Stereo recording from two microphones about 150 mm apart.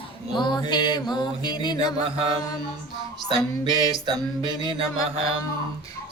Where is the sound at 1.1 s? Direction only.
30° left (ahead or behind).